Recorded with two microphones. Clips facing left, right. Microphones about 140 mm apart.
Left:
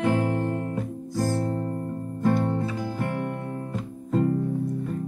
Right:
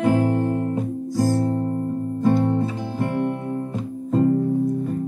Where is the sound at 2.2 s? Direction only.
25° right (ahead or behind).